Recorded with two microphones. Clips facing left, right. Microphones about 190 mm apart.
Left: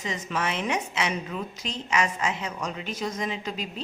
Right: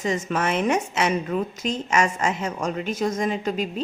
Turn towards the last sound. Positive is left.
turn(degrees=-50)  # may be behind; listen again after turning